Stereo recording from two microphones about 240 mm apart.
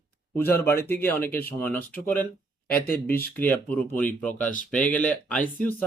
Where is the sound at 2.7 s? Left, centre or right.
Left.